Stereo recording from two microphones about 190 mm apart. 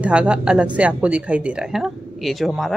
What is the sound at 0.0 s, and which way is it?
Speech, 5° right (ahead or behind).